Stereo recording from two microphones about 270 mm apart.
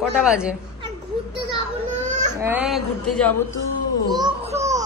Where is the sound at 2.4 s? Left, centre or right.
Centre.